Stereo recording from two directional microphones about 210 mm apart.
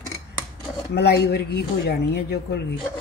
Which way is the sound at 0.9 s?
50° left (ahead or behind).